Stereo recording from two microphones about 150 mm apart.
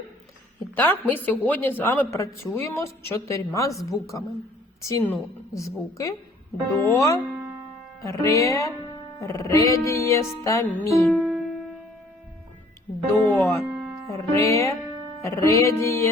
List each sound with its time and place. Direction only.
0.8 s speech: 10° left (ahead or behind)
11.0 s music: centre (ahead or behind)
13.2 s speech: 15° left (ahead or behind)